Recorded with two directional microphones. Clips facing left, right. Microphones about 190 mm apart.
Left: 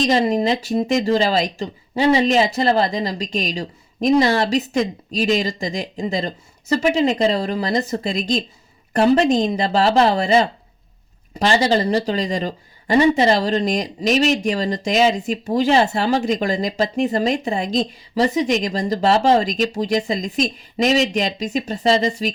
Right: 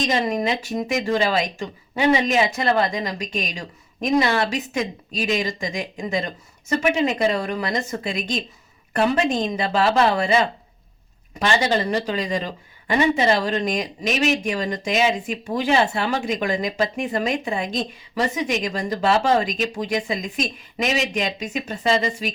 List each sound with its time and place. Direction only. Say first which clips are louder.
0.1 s speech: left 5 dB; 30° left (ahead or behind)